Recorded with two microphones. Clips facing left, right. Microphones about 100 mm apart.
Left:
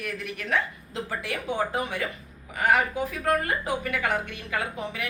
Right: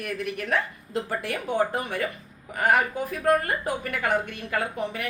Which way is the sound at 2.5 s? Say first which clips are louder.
Right 1 dB; 45° right (ahead or behind).